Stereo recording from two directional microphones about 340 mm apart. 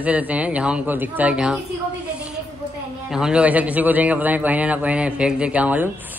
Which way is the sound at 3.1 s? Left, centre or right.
Centre.